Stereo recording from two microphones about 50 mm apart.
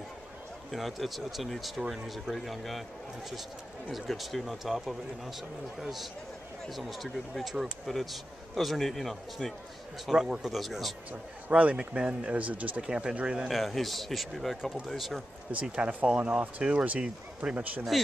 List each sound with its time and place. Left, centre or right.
0.7 s speech: centre
3.9 s speech: centre
10.0 s speech: centre
11.5 s speech: right
13.5 s speech: centre
15.6 s speech: right
17.9 s speech: centre